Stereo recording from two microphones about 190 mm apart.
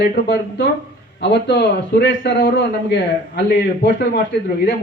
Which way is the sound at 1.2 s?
65° left (ahead or behind).